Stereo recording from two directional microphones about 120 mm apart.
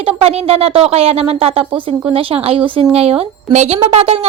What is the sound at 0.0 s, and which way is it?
Speech, 55° right (ahead or behind).